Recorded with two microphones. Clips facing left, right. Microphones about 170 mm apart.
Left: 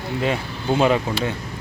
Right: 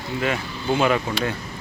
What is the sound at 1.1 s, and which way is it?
Speech, 15° left (ahead or behind).